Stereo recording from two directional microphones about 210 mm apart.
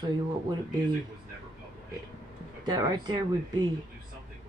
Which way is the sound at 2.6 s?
20° right (ahead or behind).